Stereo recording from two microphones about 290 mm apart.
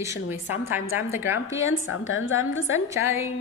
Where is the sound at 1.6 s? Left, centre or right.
Left.